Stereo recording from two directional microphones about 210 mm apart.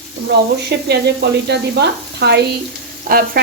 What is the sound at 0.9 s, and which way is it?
Speech, 55° right (ahead or behind).